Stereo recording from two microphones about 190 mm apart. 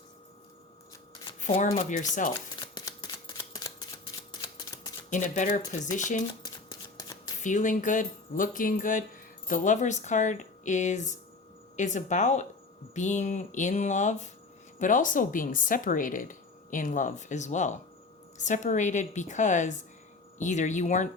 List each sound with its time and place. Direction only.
1.5 s speech: 35° left (ahead or behind)
2.6 s camera: 20° left (ahead or behind)
4.3 s a sound: 25° left (ahead or behind)
5.1 s speech: 40° left (ahead or behind)
6.4 s shuffling cards: 20° left (ahead or behind)
7.4 s speech: 40° left (ahead or behind)